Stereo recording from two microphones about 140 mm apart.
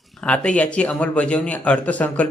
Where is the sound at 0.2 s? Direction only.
10° left (ahead or behind).